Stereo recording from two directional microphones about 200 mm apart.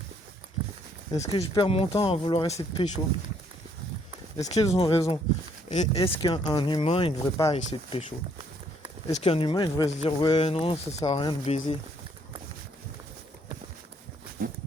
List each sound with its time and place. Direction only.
1.1 s speech: 15° left (ahead or behind)
1.4 s speech: 30° left (ahead or behind)
4.4 s speech: 15° left (ahead or behind)
9.1 s speech: 30° left (ahead or behind)